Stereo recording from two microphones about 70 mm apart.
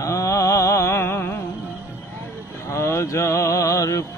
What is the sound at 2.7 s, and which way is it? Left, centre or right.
Music, left.